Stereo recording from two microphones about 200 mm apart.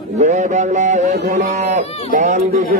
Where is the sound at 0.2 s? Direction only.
35° right (ahead or behind).